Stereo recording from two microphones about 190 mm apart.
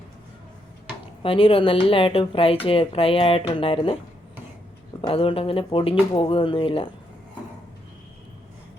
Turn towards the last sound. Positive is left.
turn(degrees=30)  # may be behind; listen again after turning